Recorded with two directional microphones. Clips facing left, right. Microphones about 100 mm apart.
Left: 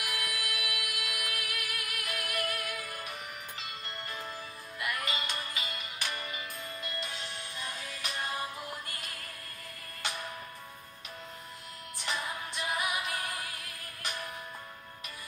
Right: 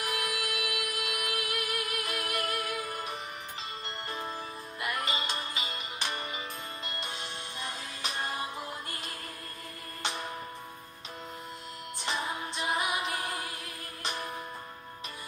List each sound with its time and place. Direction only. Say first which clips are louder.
0.0 s music: right 4 dB; 35° right (ahead or behind)
4.1 s music: right 7 dB; 25° right (ahead or behind)
12.0 s music: right 2 dB; 30° right (ahead or behind)